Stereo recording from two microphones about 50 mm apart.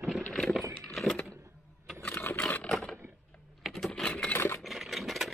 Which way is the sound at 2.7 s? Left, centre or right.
Centre.